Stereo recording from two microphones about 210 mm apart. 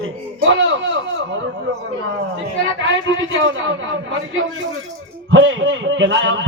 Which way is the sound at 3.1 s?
65° right (ahead or behind).